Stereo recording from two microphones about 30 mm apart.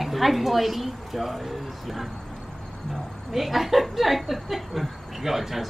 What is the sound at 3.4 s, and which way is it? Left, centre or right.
Speech, centre.